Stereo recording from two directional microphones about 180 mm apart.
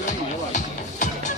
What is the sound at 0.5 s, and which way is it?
Music, 45° left (ahead or behind).